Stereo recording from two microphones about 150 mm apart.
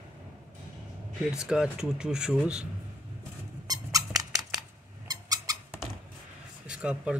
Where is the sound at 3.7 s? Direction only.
25° right (ahead or behind).